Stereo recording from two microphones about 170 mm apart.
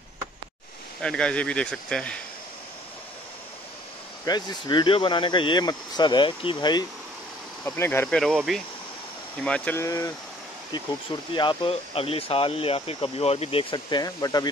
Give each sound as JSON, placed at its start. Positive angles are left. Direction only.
{"t": 1.0, "sound": "speech", "side_deg": 5}
{"t": 4.3, "sound": "speech", "side_deg": 25}
{"t": 7.6, "sound": "speech", "side_deg": 10}
{"t": 8.5, "sound": "speech", "side_deg": 0}
{"t": 9.8, "sound": "speech", "side_deg": 20}
{"t": 11.3, "sound": "speech", "side_deg": 30}